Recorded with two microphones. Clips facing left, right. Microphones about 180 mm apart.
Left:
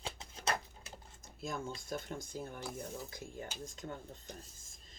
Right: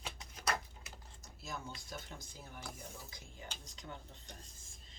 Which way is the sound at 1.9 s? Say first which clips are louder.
Left 8 dB; 50° left (ahead or behind).